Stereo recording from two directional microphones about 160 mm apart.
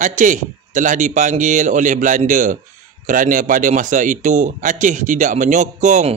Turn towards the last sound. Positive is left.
turn(degrees=-45)  # may be behind; listen again after turning